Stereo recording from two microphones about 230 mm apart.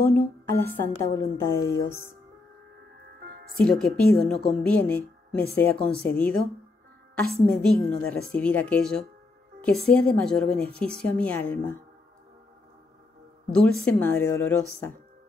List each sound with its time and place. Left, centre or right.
0.1 s a woman's voice: centre
3.2 s music: right
3.5 s a woman's voice: centre
13.5 s a woman's voice: centre